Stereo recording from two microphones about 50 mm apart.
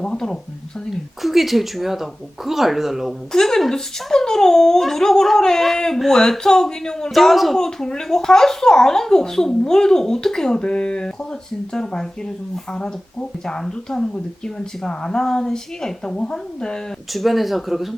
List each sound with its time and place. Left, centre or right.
0.0 s a child's voice: centre
1.2 s a child's voice: centre
7.1 s a child's voice: centre
13.4 s a child's voice: centre
17.1 s speech: centre